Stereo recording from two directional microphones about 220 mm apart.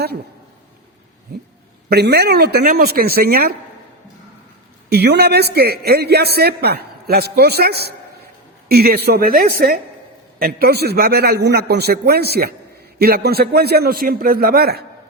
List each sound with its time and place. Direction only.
1.9 s a man's voice: 45° right (ahead or behind)
4.9 s a man's voice: 45° right (ahead or behind)